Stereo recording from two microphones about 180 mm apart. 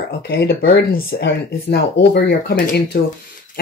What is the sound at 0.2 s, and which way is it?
Speech, 60° left (ahead or behind).